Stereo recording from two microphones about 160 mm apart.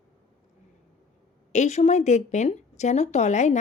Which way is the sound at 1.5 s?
45° left (ahead or behind).